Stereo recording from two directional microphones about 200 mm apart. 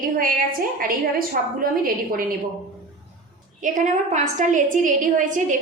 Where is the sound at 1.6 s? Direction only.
45° right (ahead or behind).